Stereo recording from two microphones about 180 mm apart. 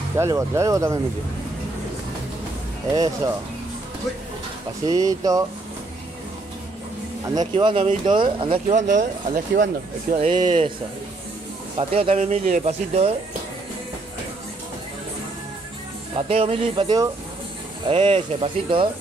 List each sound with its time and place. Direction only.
0.1 s speech: 15° right (ahead or behind)
2.9 s speech: 20° right (ahead or behind)
4.8 s speech: 20° right (ahead or behind)
7.5 s speech: 30° right (ahead or behind)
8.7 s speech: 45° right (ahead or behind)
10.1 s speech: 30° right (ahead or behind)
11.7 s speech: 30° right (ahead or behind)
16.2 s speech: 35° right (ahead or behind)